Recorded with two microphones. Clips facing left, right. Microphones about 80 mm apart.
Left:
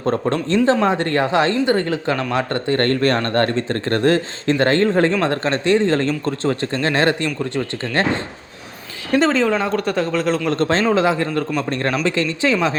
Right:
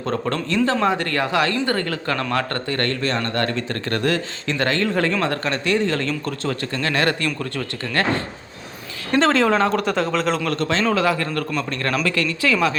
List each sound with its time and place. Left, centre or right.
0.0 s speech: left
2.7 s speech: left
3.2 s speech: left
9.1 s speech: centre
10.5 s speech: left
10.9 s speech: left